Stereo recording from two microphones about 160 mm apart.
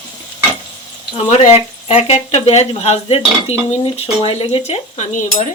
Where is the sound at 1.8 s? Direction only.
40° left (ahead or behind).